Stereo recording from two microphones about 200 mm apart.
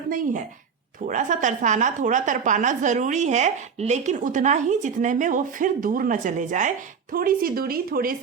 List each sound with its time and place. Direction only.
1.0 s a woman's voice: 40° right (ahead or behind)